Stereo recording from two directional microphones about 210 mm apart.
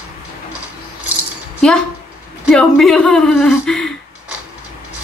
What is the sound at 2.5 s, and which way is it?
Speech, centre (ahead or behind).